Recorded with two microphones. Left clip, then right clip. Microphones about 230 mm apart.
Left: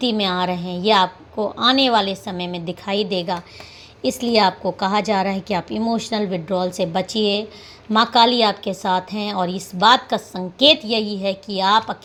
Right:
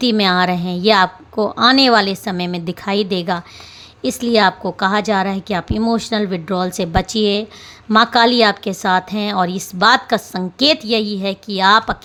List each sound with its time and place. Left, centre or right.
0.0 s a woman's voice: right